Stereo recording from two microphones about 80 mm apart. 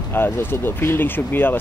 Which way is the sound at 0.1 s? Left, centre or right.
Left.